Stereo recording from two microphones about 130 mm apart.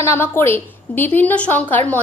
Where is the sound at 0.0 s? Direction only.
15° left (ahead or behind).